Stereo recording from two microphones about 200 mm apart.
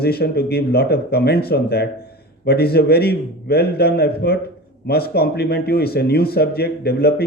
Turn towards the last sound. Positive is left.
turn(degrees=50)  # may be behind; listen again after turning